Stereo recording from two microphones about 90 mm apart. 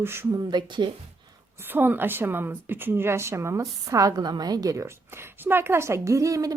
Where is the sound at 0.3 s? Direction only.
45° right (ahead or behind).